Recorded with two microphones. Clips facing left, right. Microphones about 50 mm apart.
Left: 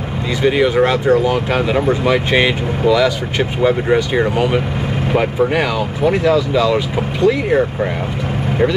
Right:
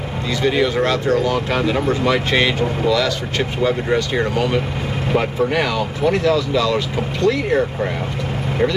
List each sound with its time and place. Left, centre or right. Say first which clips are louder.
0.4 s speech: left 4 dB; centre